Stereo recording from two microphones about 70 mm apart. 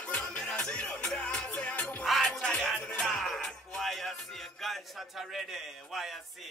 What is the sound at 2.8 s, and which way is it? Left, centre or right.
Music, centre.